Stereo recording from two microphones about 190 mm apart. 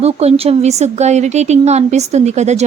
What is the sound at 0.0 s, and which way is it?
A woman's voice, 35° right (ahead or behind).